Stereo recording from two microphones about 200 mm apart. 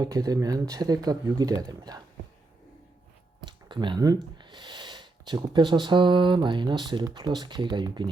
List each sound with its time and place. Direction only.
0.0 s speech: 20° right (ahead or behind)
3.4 s speech: 20° right (ahead or behind)